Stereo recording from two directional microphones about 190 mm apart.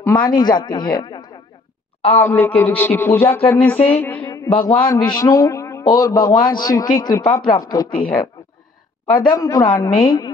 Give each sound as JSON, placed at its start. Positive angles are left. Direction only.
{"t": 0.0, "sound": "a man's voice", "side_deg": 25}
{"t": 2.1, "sound": "music", "side_deg": 10}
{"t": 4.2, "sound": "a sound", "side_deg": 25}
{"t": 4.8, "sound": "a man's voice", "side_deg": 20}
{"t": 9.1, "sound": "a man's voice", "side_deg": 20}